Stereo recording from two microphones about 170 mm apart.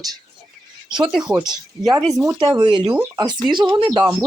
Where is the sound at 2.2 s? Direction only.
25° right (ahead or behind).